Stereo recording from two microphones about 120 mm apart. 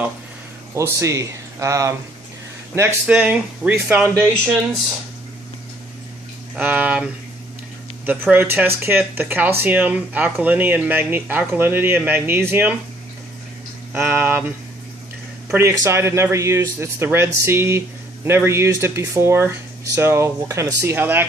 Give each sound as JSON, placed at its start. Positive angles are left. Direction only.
{"t": 0.7, "sound": "speech", "side_deg": -25}
{"t": 6.5, "sound": "speech", "side_deg": -15}
{"t": 13.9, "sound": "speech", "side_deg": -20}
{"t": 15.5, "sound": "speech", "side_deg": -20}